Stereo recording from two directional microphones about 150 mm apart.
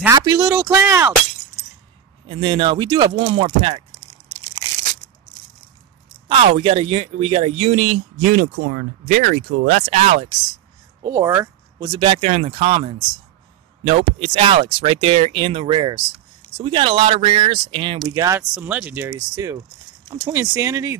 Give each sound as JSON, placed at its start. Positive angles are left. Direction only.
{"t": 0.1, "sound": "speech", "side_deg": -25}
{"t": 2.2, "sound": "speech", "side_deg": -35}
{"t": 6.2, "sound": "speech", "side_deg": -40}
{"t": 8.3, "sound": "speech", "side_deg": -75}
{"t": 11.0, "sound": "speech", "side_deg": -20}
{"t": 12.0, "sound": "speech", "side_deg": -45}
{"t": 18.1, "sound": "speech", "side_deg": -20}
{"t": 18.5, "sound": "speech", "side_deg": -5}
{"t": 19.1, "sound": "speech", "side_deg": -25}